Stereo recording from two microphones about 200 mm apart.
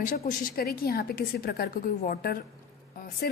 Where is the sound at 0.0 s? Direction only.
45° left (ahead or behind).